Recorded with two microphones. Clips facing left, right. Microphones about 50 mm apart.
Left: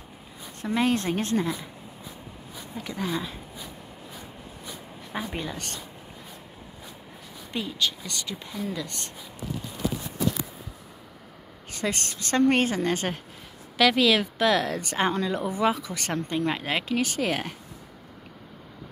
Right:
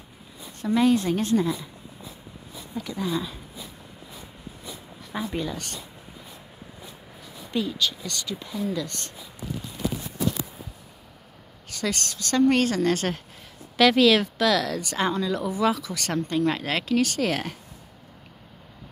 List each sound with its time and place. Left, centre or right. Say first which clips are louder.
0.6 s a woman's voice: right 4 dB; left
2.8 s a woman's voice: right 2 dB; left
5.1 s speech: right 3 dB; left
7.5 s a woman's voice: right 2 dB; left
11.7 s speech: right 1 dB; left; by 14.3 s centre
14.4 s speech: even; left